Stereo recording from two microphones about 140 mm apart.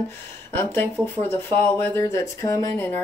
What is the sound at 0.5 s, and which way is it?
Speech, 15° left (ahead or behind).